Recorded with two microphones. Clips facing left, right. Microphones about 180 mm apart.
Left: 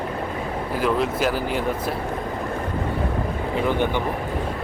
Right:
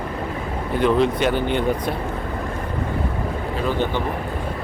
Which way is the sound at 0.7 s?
5° left (ahead or behind).